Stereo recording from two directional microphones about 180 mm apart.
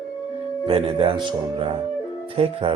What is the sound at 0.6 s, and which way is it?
A man's voice, 30° right (ahead or behind).